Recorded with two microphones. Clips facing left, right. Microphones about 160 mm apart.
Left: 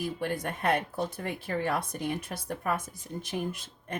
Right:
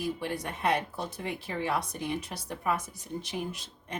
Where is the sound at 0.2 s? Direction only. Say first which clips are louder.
Left 1 dB; 50° left (ahead or behind).